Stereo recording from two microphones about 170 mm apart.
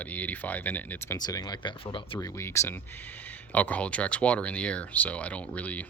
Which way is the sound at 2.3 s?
15° left (ahead or behind).